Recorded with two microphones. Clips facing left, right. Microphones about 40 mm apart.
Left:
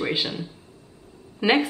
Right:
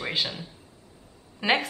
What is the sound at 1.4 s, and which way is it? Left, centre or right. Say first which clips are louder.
Speech: left 4 dB; centre.